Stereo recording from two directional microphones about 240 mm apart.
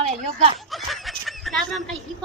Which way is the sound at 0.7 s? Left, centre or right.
Centre.